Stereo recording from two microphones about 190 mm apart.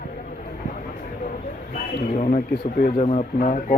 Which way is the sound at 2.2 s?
40° left (ahead or behind).